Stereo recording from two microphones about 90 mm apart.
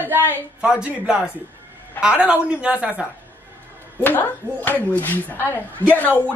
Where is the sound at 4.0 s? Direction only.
20° left (ahead or behind).